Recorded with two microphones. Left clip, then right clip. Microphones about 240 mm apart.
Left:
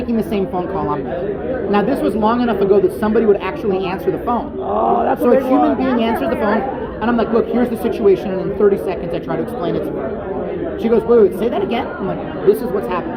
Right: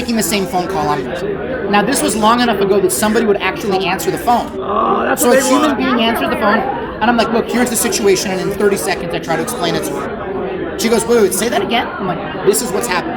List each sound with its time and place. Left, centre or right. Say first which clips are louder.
0.1 s a woman's voice: right 3 dB; right
10.8 s speech: even; right